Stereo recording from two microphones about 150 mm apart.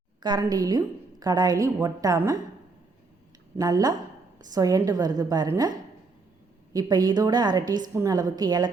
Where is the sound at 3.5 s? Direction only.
25° right (ahead or behind).